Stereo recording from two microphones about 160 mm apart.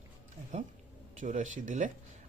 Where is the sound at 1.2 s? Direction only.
50° right (ahead or behind).